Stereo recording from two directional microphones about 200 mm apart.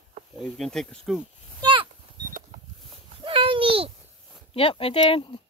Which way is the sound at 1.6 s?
25° right (ahead or behind).